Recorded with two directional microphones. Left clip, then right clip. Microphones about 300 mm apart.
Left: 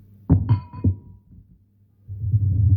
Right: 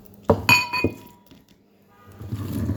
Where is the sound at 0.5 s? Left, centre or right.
Right.